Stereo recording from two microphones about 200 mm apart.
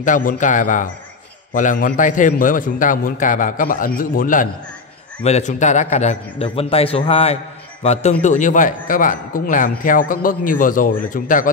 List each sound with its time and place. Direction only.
0.0 s a man's voice: 40° left (ahead or behind)